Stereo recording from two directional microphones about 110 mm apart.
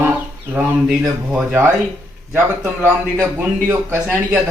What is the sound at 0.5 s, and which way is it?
Speech, 10° right (ahead or behind).